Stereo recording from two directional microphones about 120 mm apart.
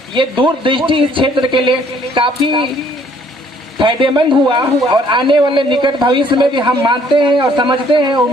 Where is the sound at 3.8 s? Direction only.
45° right (ahead or behind).